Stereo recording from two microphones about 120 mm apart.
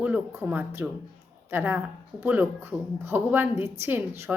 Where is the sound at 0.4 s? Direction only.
15° right (ahead or behind).